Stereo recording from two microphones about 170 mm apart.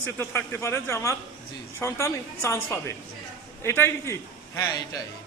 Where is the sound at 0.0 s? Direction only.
15° left (ahead or behind).